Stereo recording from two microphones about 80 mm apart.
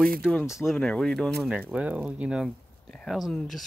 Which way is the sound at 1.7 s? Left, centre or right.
Centre.